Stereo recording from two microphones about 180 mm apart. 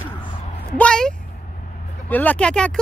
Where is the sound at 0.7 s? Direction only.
5° left (ahead or behind).